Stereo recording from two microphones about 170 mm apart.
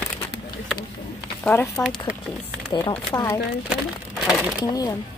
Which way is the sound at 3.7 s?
5° right (ahead or behind).